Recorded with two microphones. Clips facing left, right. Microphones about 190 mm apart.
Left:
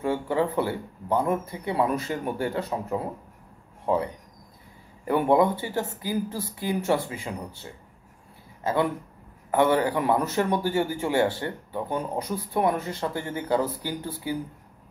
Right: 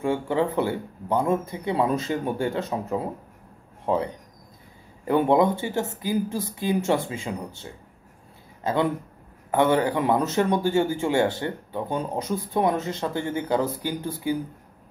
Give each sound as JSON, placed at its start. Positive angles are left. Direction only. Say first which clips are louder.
{"t": 0.0, "sound": "a man's voice", "louder": "right 1 dB", "side_deg": -20}
{"t": 9.5, "sound": "a man's voice", "louder": "right 1 dB", "side_deg": -20}